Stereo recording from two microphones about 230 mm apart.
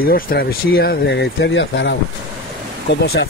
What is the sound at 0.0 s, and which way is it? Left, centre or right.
Speech, left.